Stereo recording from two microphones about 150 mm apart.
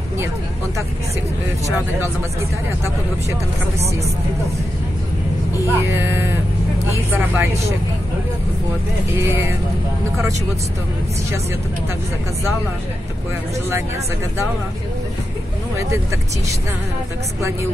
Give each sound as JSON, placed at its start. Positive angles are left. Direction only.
{"t": 5.7, "sound": "speech", "side_deg": -15}
{"t": 9.1, "sound": "speech", "side_deg": -15}